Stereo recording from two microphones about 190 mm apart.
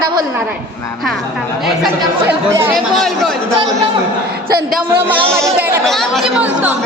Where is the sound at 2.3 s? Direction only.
10° right (ahead or behind).